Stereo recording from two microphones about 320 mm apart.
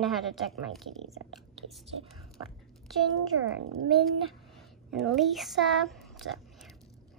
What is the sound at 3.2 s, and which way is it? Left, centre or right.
Speech, right.